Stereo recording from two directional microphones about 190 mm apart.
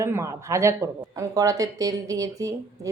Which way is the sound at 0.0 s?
15° right (ahead or behind).